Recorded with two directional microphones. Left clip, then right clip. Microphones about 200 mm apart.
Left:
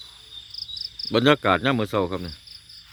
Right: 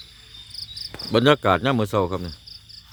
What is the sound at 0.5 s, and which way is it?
Cricket, 30° left (ahead or behind).